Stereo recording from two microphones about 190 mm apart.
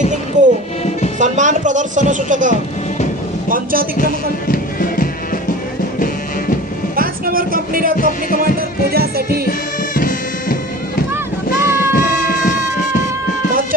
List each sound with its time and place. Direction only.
0.4 s music: 40° right (ahead or behind)
1.2 s speech: 40° right (ahead or behind)
3.9 s music: 50° left (ahead or behind)
6.9 s a sound: 50° right (ahead or behind)
8.4 s music: 50° right (ahead or behind)
9.5 s bagpipes: 45° left (ahead or behind)
11.6 s music: 15° right (ahead or behind)